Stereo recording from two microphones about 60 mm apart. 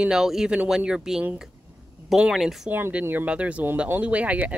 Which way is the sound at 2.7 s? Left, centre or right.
Right.